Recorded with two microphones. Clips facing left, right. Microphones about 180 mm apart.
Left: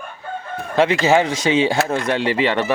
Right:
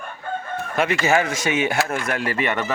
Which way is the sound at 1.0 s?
25° left (ahead or behind).